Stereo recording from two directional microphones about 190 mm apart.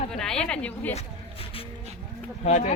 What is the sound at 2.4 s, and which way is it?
Speech, 35° left (ahead or behind).